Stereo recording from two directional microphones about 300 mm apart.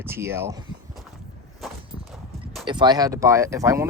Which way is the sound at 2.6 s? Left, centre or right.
Centre.